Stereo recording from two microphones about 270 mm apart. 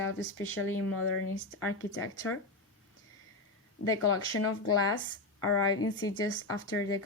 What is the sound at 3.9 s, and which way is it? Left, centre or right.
A woman's voice, left.